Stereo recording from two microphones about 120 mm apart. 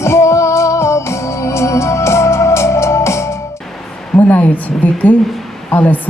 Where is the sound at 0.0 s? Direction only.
25° left (ahead or behind).